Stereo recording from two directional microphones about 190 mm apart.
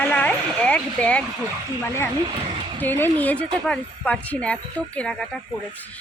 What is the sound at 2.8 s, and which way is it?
Speech, 10° left (ahead or behind).